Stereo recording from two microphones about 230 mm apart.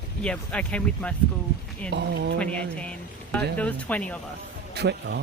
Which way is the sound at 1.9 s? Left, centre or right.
Right.